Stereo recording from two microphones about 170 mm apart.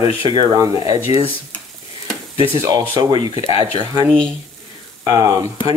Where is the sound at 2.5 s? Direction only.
20° right (ahead or behind).